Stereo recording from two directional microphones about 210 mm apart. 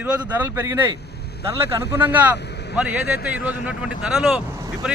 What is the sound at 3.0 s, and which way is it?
Speech, 50° left (ahead or behind).